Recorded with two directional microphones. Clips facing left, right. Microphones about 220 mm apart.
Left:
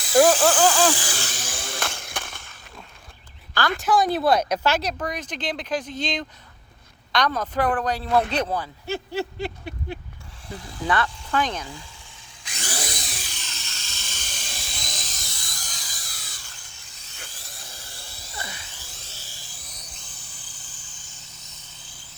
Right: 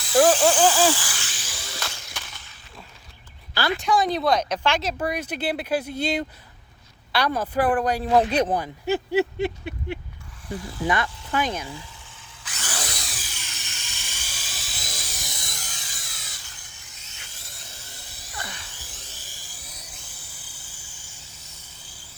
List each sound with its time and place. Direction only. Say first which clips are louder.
0.1 s speech: left 1 dB; 10° left (ahead or behind)
0.4 s speech: even; 10° right (ahead or behind)
1.1 s a sound: left 6 dB; 40° left (ahead or behind)
3.5 s speech: even; 10° right (ahead or behind)
3.8 s speech: left 2 dB; centre (ahead or behind)
5.0 s speech: right 3 dB; 10° right (ahead or behind)
10.8 s speech: left 1 dB; 15° right (ahead or behind)
12.5 s power tool: left 2 dB; 10° left (ahead or behind)
13.3 s helicopter: left 1 dB; 10° right (ahead or behind)
15.6 s a sound: even; 40° left (ahead or behind)
16.6 s a sound: even; 20° right (ahead or behind)
18.3 s electric toothbrush: even; 10° left (ahead or behind)
18.8 s music: even; 15° right (ahead or behind)